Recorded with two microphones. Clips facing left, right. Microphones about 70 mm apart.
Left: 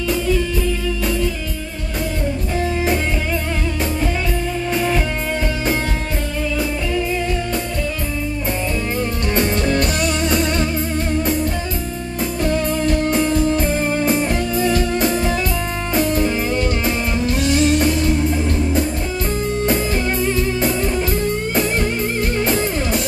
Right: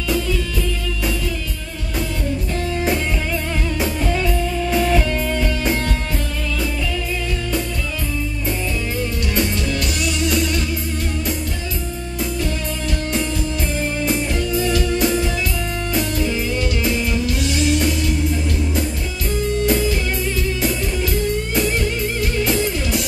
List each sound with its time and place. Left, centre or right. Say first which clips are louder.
0.1 s music: left 2 dB; centre
4.6 s music: right 2 dB; centre
9.3 s music: left 5 dB; left
12.4 s music: left 7 dB; left